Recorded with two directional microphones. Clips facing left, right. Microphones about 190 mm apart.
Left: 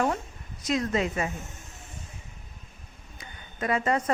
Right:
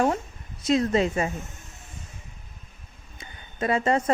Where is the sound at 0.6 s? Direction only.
25° right (ahead or behind).